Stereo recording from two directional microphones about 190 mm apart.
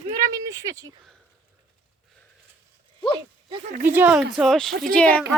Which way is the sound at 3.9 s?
10° right (ahead or behind).